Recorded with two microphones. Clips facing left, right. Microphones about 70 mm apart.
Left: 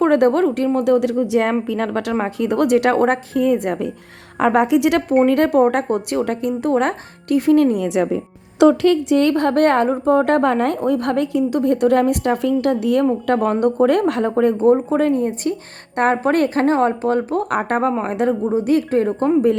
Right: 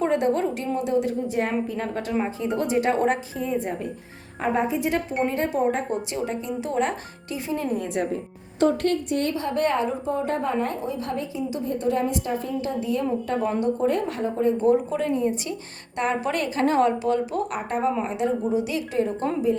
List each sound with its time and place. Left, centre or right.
0.0 s a woman's voice: left
5.2 s speech: left
10.8 s speech: left
14.6 s speech: left